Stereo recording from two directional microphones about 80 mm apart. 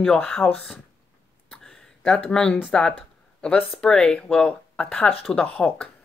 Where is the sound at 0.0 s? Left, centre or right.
Centre.